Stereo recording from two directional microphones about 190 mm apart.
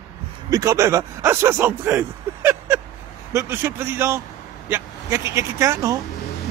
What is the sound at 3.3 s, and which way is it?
Speech, 10° right (ahead or behind).